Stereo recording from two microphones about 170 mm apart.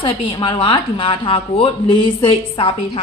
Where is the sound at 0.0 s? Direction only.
30° left (ahead or behind).